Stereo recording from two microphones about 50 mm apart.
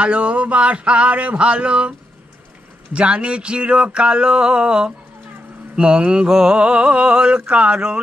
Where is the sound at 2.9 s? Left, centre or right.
Right.